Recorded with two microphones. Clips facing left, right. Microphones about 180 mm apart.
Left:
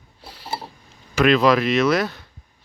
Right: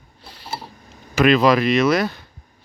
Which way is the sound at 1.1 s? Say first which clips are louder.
Right 1 dB; centre (ahead or behind).